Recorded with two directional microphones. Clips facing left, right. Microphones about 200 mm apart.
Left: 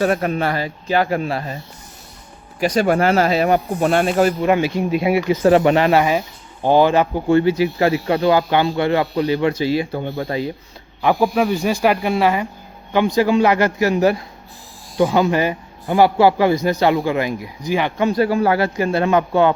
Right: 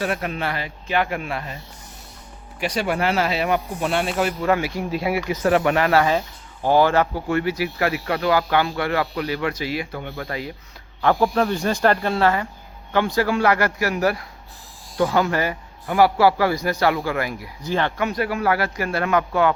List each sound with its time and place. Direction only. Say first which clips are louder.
0.0 s speech: left 7 dB; 40° left (ahead or behind)
2.6 s speech: left 7 dB; 45° left (ahead or behind)
4.4 s speech: left 4 dB; 25° left (ahead or behind)
11.0 s speech: left 2 dB; 10° left (ahead or behind)
17.9 s speech: left 7 dB; 30° left (ahead or behind)